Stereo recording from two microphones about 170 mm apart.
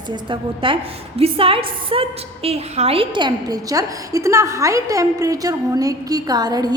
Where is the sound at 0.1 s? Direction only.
30° right (ahead or behind).